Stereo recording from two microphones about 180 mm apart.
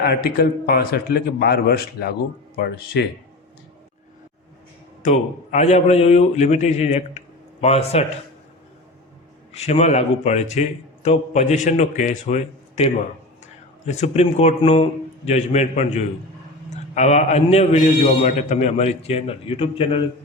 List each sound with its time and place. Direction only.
0.0 s a man's voice: 60° left (ahead or behind)
5.0 s a man's voice: 40° left (ahead or behind)
9.5 s a man's voice: 35° left (ahead or behind)